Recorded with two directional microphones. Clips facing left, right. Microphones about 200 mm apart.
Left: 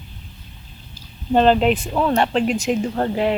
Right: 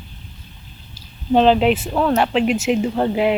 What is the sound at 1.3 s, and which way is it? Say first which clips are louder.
Speech: right 1 dB; centre (ahead or behind).